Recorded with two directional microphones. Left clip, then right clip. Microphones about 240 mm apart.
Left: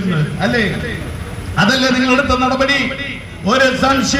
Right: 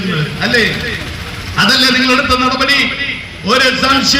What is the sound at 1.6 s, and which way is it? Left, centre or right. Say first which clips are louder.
A man's voice: right 4 dB; left.